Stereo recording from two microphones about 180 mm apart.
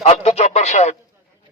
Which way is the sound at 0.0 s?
35° left (ahead or behind).